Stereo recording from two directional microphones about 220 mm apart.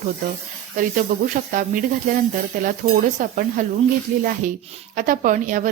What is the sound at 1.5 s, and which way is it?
A woman's voice, 40° right (ahead or behind).